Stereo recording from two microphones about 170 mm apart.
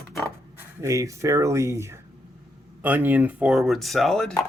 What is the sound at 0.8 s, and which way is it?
Speech, 20° right (ahead or behind).